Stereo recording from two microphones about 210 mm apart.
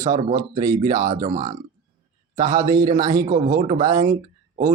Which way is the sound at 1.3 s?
35° right (ahead or behind).